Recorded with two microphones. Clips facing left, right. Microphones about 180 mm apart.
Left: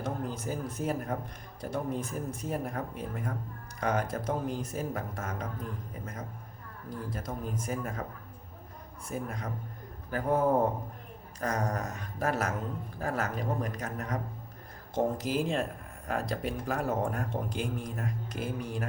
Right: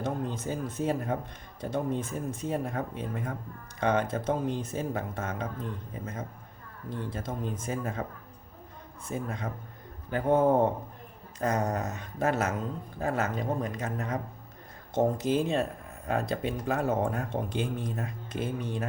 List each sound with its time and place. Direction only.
0.0 s speech: 25° right (ahead or behind)
9.0 s speech: 25° right (ahead or behind)